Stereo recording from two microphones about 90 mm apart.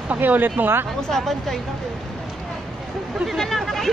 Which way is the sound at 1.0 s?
Centre (ahead or behind).